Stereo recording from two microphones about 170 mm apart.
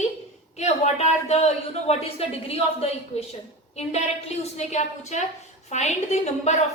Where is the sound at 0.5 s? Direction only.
40° left (ahead or behind).